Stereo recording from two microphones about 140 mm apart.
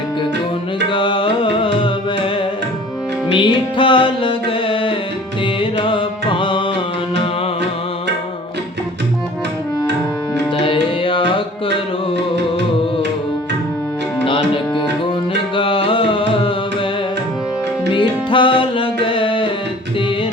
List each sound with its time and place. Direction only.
0.9 s music: 35° left (ahead or behind)
10.6 s music: 40° left (ahead or behind)
14.3 s music: 40° left (ahead or behind)
17.9 s music: 35° left (ahead or behind)